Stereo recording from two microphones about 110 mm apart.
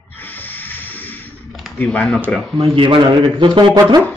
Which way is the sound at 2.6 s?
50° right (ahead or behind).